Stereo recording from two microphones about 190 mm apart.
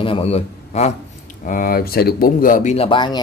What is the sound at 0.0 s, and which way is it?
Speech, 30° left (ahead or behind).